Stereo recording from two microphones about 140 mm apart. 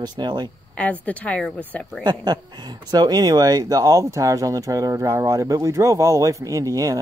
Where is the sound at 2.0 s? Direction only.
30° right (ahead or behind).